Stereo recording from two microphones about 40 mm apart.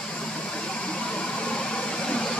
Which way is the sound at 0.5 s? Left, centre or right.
Left.